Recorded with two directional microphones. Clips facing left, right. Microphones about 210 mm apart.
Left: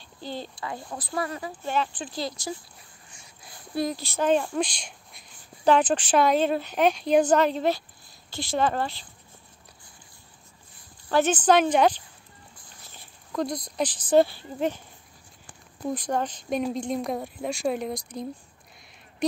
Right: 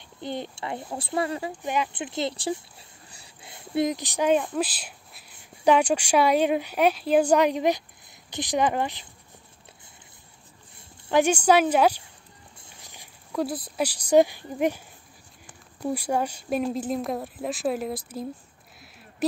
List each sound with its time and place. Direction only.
0.2 s speech: 20° right (ahead or behind)
1.5 s speech: 15° right (ahead or behind)
11.1 s speech: 15° right (ahead or behind)
15.9 s speech: 10° right (ahead or behind)